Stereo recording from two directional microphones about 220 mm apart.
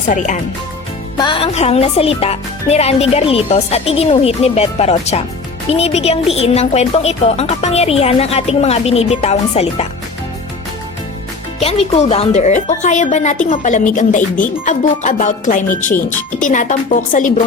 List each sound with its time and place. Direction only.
0.1 s speech: 35° left (ahead or behind)
1.2 s a woman's voice: 25° left (ahead or behind)
11.6 s speech: 25° left (ahead or behind)